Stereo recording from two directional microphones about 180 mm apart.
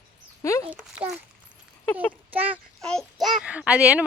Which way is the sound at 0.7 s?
10° right (ahead or behind).